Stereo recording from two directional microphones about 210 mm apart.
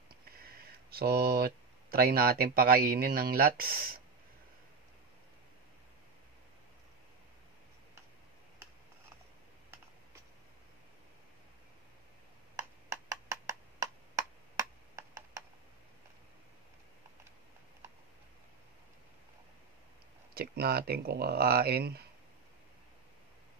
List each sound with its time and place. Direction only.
0.4 s speech: 45° right (ahead or behind)
12.9 s a sound: 15° right (ahead or behind)
20.3 s speech: 50° right (ahead or behind)